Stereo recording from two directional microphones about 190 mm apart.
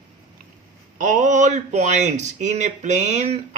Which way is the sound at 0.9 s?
40° right (ahead or behind).